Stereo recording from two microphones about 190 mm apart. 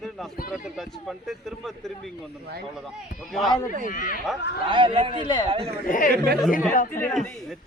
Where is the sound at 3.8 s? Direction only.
45° left (ahead or behind).